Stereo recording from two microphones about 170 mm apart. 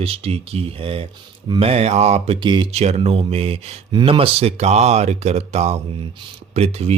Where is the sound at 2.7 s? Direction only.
40° right (ahead or behind).